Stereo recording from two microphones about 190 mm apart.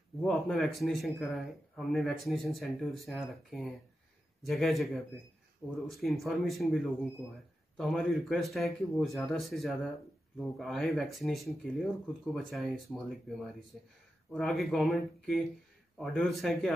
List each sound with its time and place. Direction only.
0.2 s speech: centre (ahead or behind)